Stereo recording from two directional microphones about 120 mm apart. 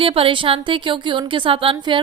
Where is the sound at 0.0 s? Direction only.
50° right (ahead or behind).